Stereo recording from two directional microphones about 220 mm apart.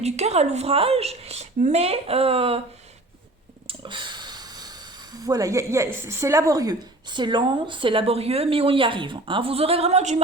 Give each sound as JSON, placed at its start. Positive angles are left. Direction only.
{"t": 0.0, "sound": "a woman's voice", "side_deg": -30}
{"t": 3.7, "sound": "speech", "side_deg": -20}